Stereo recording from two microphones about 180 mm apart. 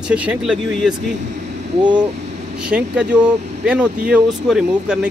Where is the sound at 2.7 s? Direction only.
5° right (ahead or behind).